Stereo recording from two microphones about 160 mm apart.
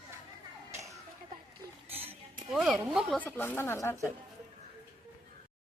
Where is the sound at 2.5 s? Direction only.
5° right (ahead or behind).